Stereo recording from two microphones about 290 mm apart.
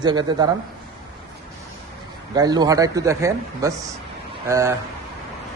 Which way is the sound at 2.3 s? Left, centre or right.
Centre.